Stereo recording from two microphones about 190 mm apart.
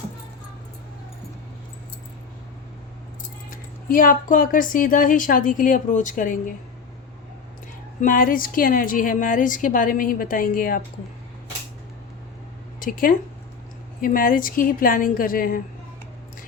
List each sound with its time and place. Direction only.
3.8 s a woman's voice: 45° left (ahead or behind)
8.0 s a woman's voice: 45° left (ahead or behind)
12.8 s a woman's voice: 45° left (ahead or behind)